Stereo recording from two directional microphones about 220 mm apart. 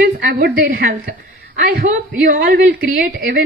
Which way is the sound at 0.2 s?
40° right (ahead or behind).